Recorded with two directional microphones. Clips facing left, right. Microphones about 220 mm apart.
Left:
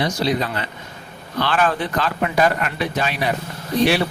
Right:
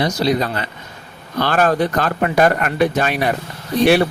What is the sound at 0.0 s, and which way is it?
Speech, 40° right (ahead or behind).